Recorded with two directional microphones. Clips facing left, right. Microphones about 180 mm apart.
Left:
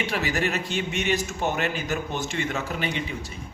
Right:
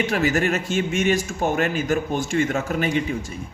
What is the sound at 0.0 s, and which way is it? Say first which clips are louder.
Speech: right 5 dB; 45° right (ahead or behind).